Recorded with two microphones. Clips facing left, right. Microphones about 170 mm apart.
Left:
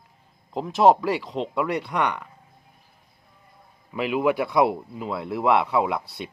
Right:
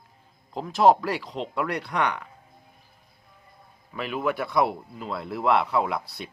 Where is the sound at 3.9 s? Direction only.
15° left (ahead or behind).